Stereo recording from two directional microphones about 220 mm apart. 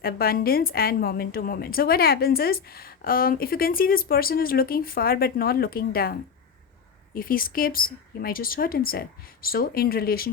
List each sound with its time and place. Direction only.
0.0 s a woman's voice: 45° left (ahead or behind)